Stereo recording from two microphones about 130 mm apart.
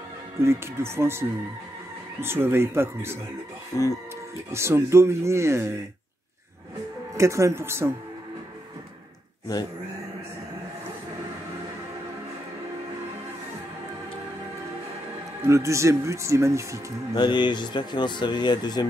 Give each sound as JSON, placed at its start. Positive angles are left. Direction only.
{"t": 0.4, "sound": "speech", "side_deg": -20}
{"t": 2.2, "sound": "speech", "side_deg": -20}
{"t": 3.7, "sound": "speech", "side_deg": 25}
{"t": 4.5, "sound": "speech", "side_deg": -20}
{"t": 7.2, "sound": "speech", "side_deg": -25}
{"t": 15.4, "sound": "speech", "side_deg": -25}
{"t": 17.1, "sound": "speech", "side_deg": 35}